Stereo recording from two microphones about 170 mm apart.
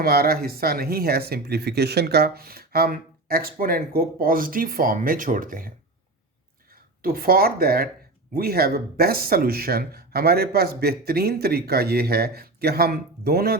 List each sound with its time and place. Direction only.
0.0 s speech: 65° right (ahead or behind)
7.0 s speech: 60° right (ahead or behind)